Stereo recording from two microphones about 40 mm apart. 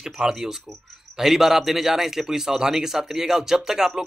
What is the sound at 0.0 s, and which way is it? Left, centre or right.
Speech, centre.